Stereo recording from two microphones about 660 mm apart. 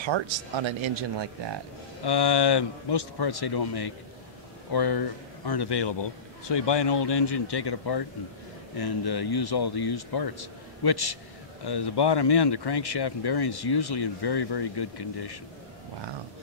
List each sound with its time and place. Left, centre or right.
0.0 s speech: right
2.0 s speech: left